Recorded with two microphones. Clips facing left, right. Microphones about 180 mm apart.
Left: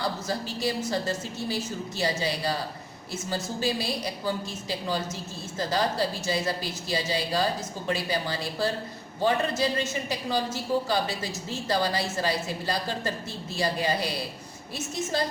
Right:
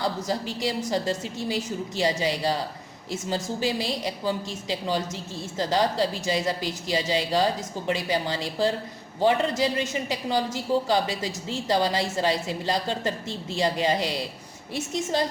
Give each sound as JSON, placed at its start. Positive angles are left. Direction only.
{"t": 0.0, "sound": "a woman's voice", "side_deg": -15}